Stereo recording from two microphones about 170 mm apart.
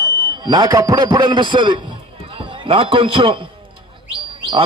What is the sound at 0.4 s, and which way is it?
A man's voice, 25° right (ahead or behind).